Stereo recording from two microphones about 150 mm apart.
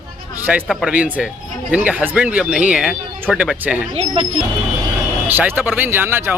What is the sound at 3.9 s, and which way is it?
Speech, 40° right (ahead or behind).